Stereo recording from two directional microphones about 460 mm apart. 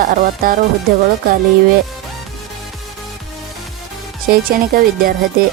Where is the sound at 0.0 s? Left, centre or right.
Centre.